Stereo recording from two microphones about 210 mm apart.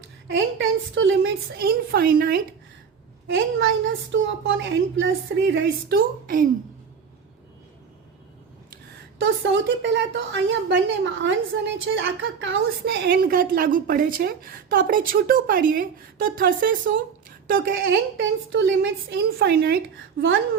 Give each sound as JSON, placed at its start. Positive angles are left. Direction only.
{"t": 0.3, "sound": "a sound", "side_deg": -65}
{"t": 1.5, "sound": "a woman's voice", "side_deg": -45}
{"t": 3.3, "sound": "a woman's voice", "side_deg": -60}
{"t": 8.7, "sound": "a woman's voice", "side_deg": -55}
{"t": 18.2, "sound": "a woman's voice", "side_deg": -65}